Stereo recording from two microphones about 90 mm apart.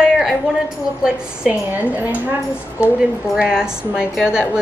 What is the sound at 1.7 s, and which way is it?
Speech, 20° right (ahead or behind).